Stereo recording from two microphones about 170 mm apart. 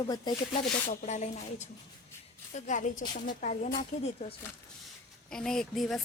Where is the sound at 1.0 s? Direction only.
40° left (ahead or behind).